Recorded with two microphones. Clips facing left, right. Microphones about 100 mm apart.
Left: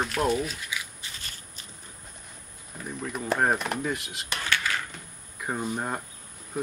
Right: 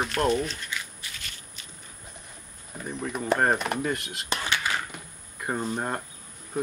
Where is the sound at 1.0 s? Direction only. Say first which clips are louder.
Even; 35° left (ahead or behind).